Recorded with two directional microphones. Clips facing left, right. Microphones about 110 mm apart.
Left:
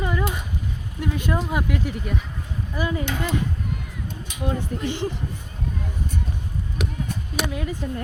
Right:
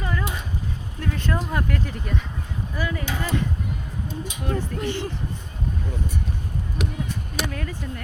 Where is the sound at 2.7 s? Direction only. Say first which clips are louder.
Left 3 dB; 20° left (ahead or behind).